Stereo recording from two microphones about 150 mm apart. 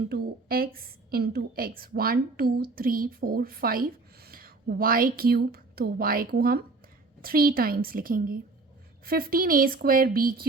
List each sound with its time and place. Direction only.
0.1 s a woman's voice: 85° right; by 8.4 s 70° right (ahead or behind)
9.0 s a woman's voice: 80° right